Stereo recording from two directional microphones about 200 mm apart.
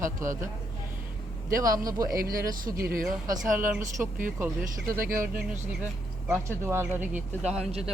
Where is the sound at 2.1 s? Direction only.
45° right (ahead or behind).